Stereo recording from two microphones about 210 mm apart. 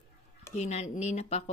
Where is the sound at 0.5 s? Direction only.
30° left (ahead or behind).